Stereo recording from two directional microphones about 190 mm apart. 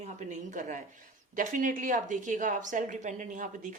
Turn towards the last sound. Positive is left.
turn(degrees=-40)  # may be behind; listen again after turning